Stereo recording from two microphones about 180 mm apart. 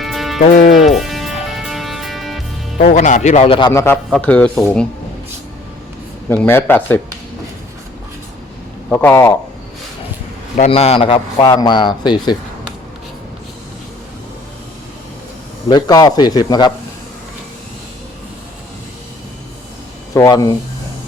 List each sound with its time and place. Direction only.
0.0 s music: centre (ahead or behind)
2.7 s a man's voice: 45° left (ahead or behind)
3.7 s speech: 15° left (ahead or behind)
6.2 s speech: 10° left (ahead or behind)
8.9 s speech: 10° left (ahead or behind)
10.6 s a man's voice: 35° left (ahead or behind)
15.7 s a man's voice: 20° left (ahead or behind)
20.1 s a man's voice: 20° left (ahead or behind)